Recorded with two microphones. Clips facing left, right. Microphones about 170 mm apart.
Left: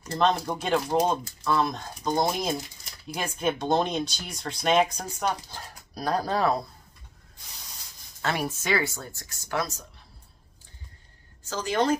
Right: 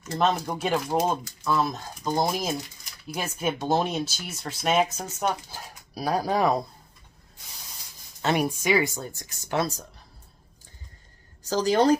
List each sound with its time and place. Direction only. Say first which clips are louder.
0.2 s speech: even; 5° right (ahead or behind)
8.2 s speech: right 4 dB; 20° right (ahead or behind)
11.4 s a woman's voice: right 5 dB; 35° right (ahead or behind)